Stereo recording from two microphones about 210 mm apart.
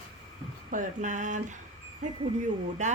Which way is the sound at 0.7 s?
35° right (ahead or behind).